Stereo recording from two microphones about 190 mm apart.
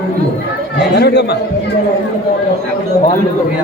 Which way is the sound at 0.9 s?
60° left (ahead or behind).